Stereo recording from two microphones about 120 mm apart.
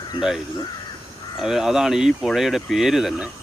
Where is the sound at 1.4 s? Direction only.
5° right (ahead or behind).